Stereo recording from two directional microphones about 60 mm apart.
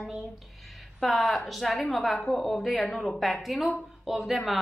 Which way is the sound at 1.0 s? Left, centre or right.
Centre.